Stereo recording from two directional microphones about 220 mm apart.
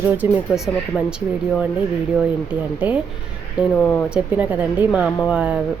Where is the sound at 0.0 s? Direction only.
10° right (ahead or behind).